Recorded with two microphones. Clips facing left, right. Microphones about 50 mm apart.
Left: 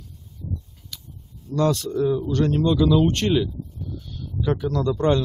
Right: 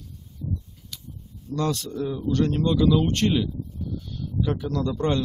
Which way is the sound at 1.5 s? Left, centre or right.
Left.